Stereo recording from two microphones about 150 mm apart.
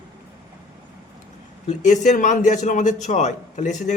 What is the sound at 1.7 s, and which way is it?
A man's voice, 50° left (ahead or behind).